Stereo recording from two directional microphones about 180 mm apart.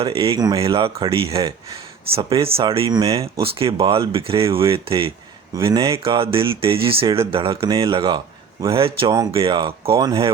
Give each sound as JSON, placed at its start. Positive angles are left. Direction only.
{"t": 0.0, "sound": "speech", "side_deg": -30}
{"t": 5.5, "sound": "speech", "side_deg": -20}
{"t": 6.0, "sound": "speech", "side_deg": -30}